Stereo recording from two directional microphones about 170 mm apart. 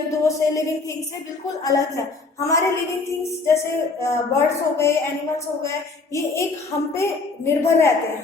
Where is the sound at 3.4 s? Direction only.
15° left (ahead or behind).